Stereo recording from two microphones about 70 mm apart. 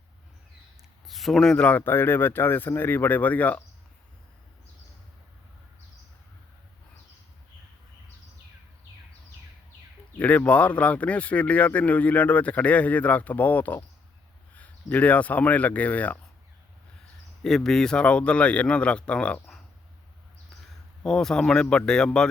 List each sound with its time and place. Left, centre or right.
1.0 s speech: centre
1.6 s speech: left
10.2 s speech: left
17.4 s a man's voice: centre
21.0 s a man's voice: centre